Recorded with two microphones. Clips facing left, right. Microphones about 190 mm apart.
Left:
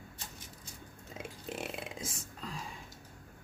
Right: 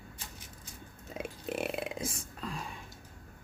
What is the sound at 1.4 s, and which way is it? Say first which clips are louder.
Speech: right 6 dB; 60° right (ahead or behind).